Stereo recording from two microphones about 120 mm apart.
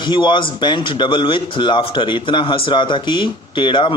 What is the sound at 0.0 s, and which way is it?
A man's voice, 40° left (ahead or behind).